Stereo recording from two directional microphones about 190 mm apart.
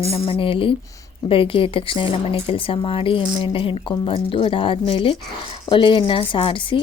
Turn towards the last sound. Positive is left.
turn(degrees=25)  # may be behind; listen again after turning